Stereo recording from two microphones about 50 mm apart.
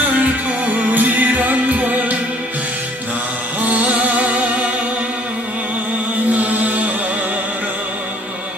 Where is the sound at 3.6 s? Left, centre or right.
Right.